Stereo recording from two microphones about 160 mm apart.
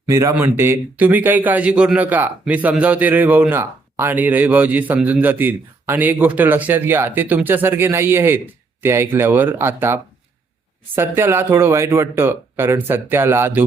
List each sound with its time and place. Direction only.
0.1 s a man's voice: 15° right (ahead or behind)